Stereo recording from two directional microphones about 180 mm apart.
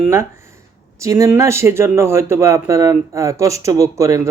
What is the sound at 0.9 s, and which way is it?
Speech, 15° right (ahead or behind).